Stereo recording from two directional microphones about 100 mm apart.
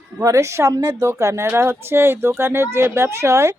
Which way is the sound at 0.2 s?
30° right (ahead or behind).